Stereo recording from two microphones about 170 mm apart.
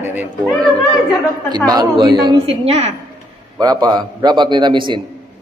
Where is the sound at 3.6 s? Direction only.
25° right (ahead or behind).